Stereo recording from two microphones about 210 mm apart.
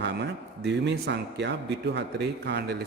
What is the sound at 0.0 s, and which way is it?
A man's voice, 55° right (ahead or behind).